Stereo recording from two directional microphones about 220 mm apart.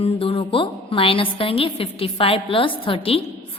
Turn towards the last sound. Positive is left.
turn(degrees=25)  # may be behind; listen again after turning